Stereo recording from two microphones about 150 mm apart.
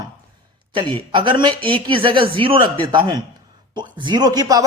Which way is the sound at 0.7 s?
35° right (ahead or behind).